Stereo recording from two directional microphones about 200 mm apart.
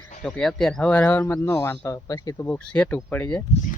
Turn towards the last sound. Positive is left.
turn(degrees=10)  # may be behind; listen again after turning